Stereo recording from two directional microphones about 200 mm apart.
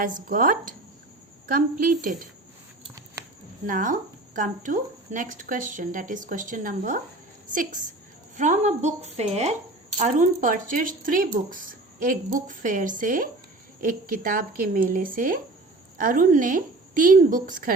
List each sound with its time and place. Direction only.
0.0 s speech: 45° right (ahead or behind)
3.7 s speech: 40° right (ahead or behind)